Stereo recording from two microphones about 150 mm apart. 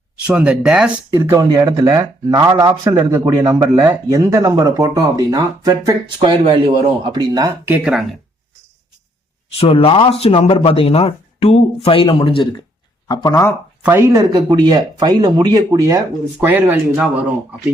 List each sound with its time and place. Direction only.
0.3 s speech: 10° right (ahead or behind); by 7.7 s 25° right (ahead or behind)
7.7 s speech: 5° right (ahead or behind)
9.6 s speech: 40° left (ahead or behind)
13.1 s speech: 25° left (ahead or behind)
13.8 s speech: 15° right (ahead or behind)